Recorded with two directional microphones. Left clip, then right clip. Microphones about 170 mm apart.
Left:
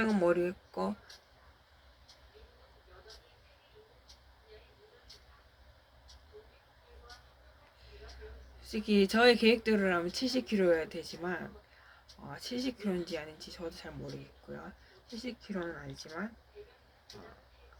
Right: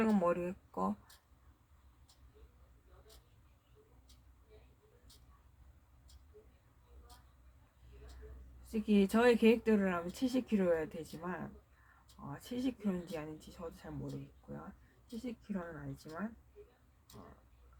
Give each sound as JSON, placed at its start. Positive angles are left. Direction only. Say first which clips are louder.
{"t": 0.0, "sound": "speech", "louder": "left 4 dB", "side_deg": 15}
{"t": 8.7, "sound": "speech", "louder": "left 4 dB", "side_deg": 15}
{"t": 15.2, "sound": "speech", "louder": "left 5 dB", "side_deg": 15}